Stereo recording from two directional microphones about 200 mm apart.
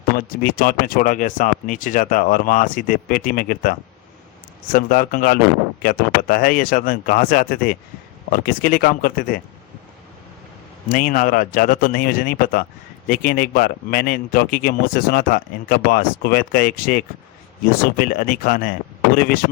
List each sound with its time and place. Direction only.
0.2 s a man's voice: 45° left (ahead or behind)
10.8 s a man's voice: 45° left (ahead or behind)